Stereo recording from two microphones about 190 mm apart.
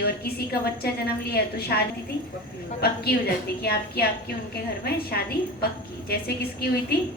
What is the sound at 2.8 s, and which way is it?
A woman's voice, 55° left (ahead or behind).